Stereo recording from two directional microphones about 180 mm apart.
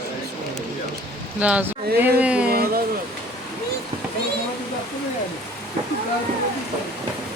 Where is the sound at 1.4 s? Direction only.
10° right (ahead or behind).